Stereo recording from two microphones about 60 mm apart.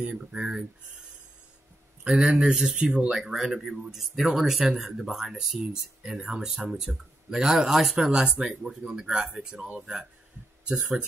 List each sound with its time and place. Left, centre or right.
0.0 s speech: centre
2.0 s speech: centre
10.8 s speech: right